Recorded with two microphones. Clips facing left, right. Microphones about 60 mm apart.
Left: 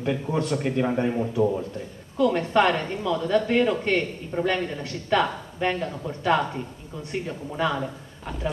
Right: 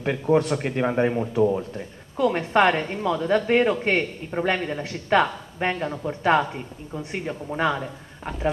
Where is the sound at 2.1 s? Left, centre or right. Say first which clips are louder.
Even; right.